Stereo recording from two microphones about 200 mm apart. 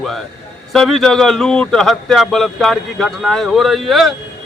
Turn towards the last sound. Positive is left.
turn(degrees=0)  # may be behind; listen again after turning